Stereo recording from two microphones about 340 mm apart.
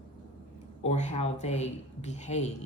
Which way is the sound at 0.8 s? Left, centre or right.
Centre.